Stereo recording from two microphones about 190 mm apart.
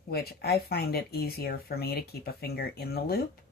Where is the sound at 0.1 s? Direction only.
55° left (ahead or behind).